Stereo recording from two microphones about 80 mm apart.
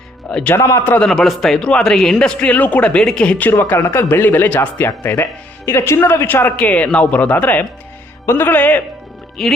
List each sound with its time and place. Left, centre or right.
0.3 s a man's voice: centre
3.5 s speech: left
5.2 s speech: left
9.4 s speech: centre